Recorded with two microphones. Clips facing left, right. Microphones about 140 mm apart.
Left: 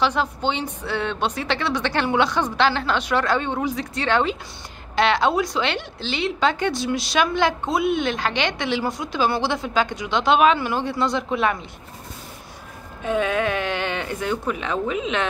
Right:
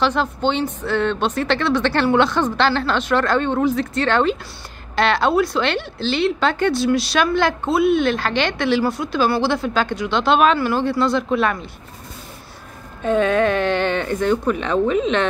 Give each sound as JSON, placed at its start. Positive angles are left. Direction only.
{"t": 0.0, "sound": "a woman's voice", "side_deg": 15}
{"t": 13.0, "sound": "a woman's voice", "side_deg": 10}